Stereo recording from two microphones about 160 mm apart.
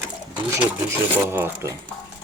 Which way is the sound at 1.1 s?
10° right (ahead or behind).